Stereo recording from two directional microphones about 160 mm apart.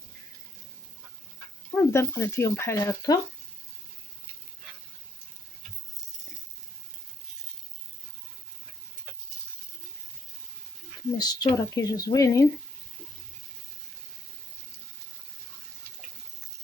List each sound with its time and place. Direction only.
1.7 s speech: 15° left (ahead or behind)
11.2 s speech: 25° left (ahead or behind)